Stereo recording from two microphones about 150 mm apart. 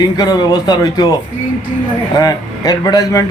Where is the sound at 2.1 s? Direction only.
25° left (ahead or behind).